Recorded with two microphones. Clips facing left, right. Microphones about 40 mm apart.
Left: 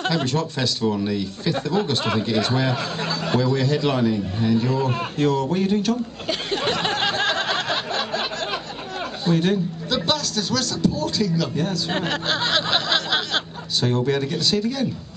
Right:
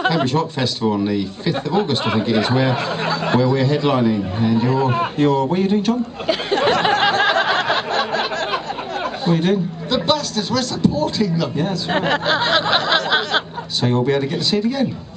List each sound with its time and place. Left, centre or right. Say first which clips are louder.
0.0 s speech: right 5 dB; centre
7.9 s a sound: right 5 dB; right
9.2 s speech: right 2 dB; centre
12.0 s music: right 8 dB; centre